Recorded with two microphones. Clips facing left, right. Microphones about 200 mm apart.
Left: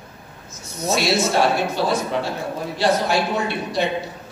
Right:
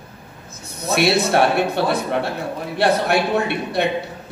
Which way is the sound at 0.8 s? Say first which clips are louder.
Right 2 dB; 60° right (ahead or behind).